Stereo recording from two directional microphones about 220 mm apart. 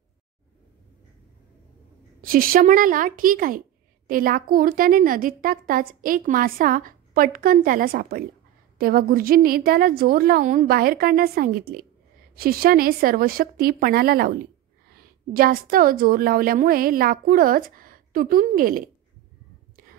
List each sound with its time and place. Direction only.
2.2 s a woman's voice: 40° right (ahead or behind)